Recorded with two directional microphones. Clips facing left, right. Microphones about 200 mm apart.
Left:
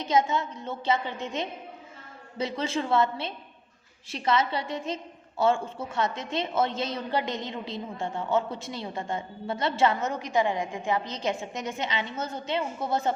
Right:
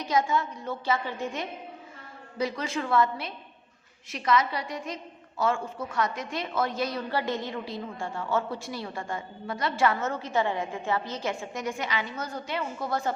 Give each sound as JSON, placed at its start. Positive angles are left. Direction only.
{"t": 0.0, "sound": "a woman's voice", "side_deg": 20}